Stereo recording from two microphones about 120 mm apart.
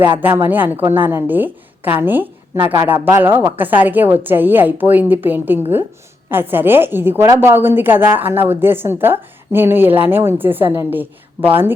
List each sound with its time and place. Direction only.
0.2 s a woman's voice: 15° right (ahead or behind)